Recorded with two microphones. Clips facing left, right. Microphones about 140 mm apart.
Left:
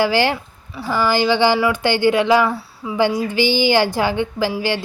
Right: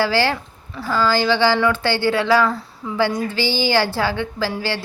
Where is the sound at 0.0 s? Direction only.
15° left (ahead or behind).